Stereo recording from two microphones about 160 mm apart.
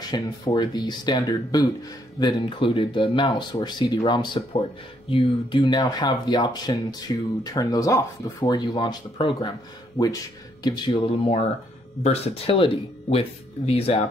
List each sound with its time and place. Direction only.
0.1 s speech: 25° left (ahead or behind)
5.6 s speech: 25° left (ahead or behind); by 14.0 s 40° left (ahead or behind)